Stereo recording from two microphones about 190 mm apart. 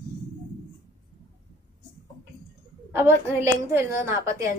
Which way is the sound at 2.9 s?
15° right (ahead or behind).